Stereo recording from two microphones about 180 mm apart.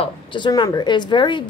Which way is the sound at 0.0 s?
25° left (ahead or behind).